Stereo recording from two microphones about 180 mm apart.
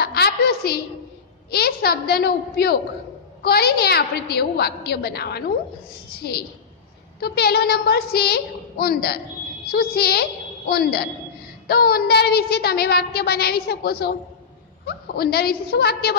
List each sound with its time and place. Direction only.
0.0 s a sound: 60° left (ahead or behind)
1.5 s child singing: 60° left (ahead or behind)
6.0 s a woman's voice: 60° left (ahead or behind)
7.2 s child singing: 60° left (ahead or behind)